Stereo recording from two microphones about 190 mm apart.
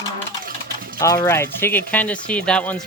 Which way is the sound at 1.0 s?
15° left (ahead or behind).